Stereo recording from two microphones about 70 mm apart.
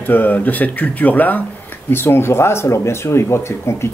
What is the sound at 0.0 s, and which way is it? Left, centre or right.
Speech, left.